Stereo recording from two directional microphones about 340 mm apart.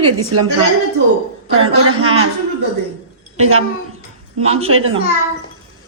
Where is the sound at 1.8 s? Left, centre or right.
Right.